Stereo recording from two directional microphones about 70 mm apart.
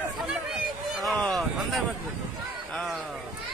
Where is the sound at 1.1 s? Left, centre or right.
Centre.